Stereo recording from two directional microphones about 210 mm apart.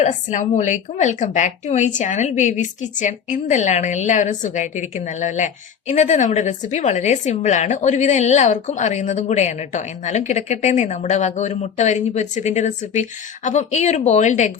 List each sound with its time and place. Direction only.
0.0 s a woman's voice: 35° left (ahead or behind)